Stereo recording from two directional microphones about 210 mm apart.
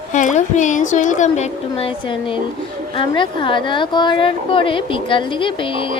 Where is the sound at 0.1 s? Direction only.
35° left (ahead or behind).